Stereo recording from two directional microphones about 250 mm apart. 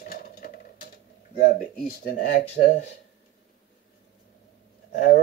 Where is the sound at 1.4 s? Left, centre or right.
Left.